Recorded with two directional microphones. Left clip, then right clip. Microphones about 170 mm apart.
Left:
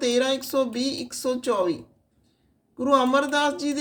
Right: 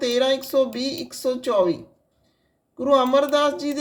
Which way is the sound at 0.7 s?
20° left (ahead or behind).